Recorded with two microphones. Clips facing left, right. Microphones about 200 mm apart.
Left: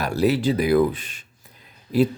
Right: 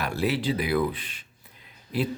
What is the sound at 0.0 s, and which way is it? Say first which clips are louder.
Speech: left 6 dB; 40° left (ahead or behind).